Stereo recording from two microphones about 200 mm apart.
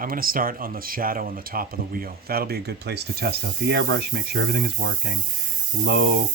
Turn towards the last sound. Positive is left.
turn(degrees=-50)  # may be behind; listen again after turning